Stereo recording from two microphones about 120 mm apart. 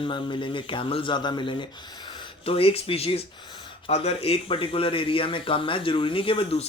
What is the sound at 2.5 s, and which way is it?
Speech, 55° left (ahead or behind).